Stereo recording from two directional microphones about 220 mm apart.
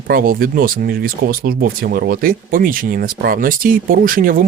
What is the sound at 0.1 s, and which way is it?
Speech, 40° right (ahead or behind).